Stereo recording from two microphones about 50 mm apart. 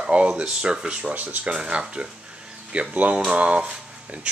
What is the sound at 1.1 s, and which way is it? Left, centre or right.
Speech, right.